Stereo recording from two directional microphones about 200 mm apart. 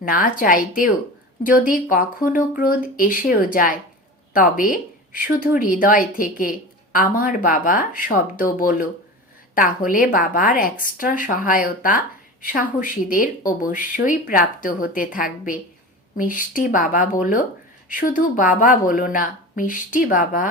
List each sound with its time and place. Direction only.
0.0 s speech: 45° left (ahead or behind)